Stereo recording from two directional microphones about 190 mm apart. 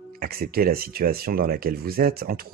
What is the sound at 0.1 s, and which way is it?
Speech, 50° right (ahead or behind).